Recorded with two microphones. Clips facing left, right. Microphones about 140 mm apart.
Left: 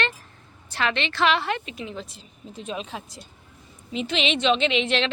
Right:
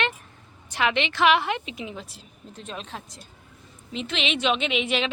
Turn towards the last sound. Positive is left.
turn(degrees=-5)  # may be behind; listen again after turning